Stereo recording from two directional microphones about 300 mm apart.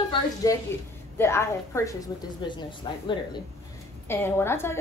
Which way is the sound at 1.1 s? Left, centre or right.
Centre.